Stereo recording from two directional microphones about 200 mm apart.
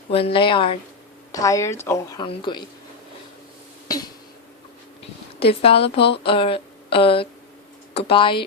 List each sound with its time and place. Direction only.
0.1 s speech: 30° left (ahead or behind)
1.3 s a woman's voice: 15° left (ahead or behind)
2.2 s speech: 25° left (ahead or behind)
3.8 s a sound: 20° left (ahead or behind)
5.6 s speech: 30° left (ahead or behind)